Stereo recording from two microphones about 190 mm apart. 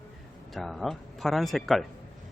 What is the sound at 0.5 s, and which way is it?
Speech, centre (ahead or behind).